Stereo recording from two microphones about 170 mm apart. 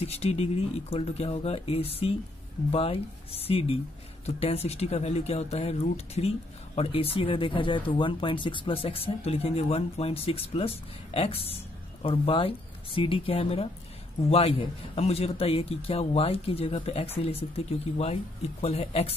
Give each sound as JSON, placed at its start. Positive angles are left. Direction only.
{"t": 0.0, "sound": "speech", "side_deg": 40}